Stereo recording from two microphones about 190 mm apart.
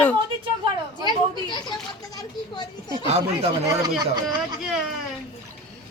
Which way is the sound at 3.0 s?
35° right (ahead or behind).